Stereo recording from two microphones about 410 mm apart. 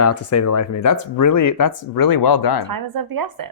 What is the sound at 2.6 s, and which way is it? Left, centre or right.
Speech, right.